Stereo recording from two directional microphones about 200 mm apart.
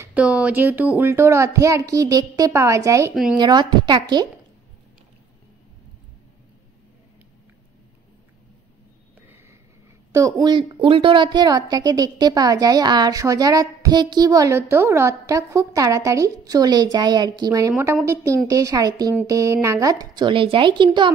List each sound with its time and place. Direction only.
0.0 s a child's voice: 5° right (ahead or behind)
10.1 s a woman's voice: 15° right (ahead or behind)